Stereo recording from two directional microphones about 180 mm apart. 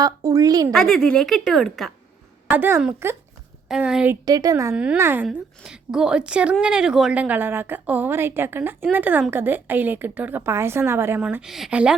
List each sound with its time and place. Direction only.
0.0 s a woman's voice: 20° right (ahead or behind)
0.7 s speech: centre (ahead or behind)
2.5 s a woman's voice: 10° right (ahead or behind)
4.3 s a woman's voice: 20° right (ahead or behind)
4.7 s a woman's voice: 5° right (ahead or behind)